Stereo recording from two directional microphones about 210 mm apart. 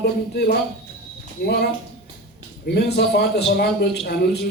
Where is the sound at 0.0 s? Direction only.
50° left (ahead or behind).